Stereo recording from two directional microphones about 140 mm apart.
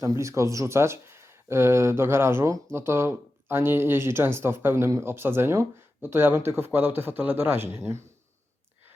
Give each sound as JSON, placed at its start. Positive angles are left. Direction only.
{"t": 0.0, "sound": "speech", "side_deg": -25}